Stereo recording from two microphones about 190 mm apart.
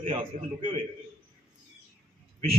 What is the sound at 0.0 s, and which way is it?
Speech, 30° right (ahead or behind).